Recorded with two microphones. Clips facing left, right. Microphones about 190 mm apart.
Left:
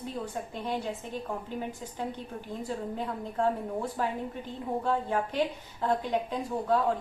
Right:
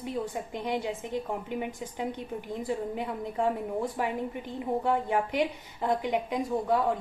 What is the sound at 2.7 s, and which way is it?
A woman's voice, 15° right (ahead or behind).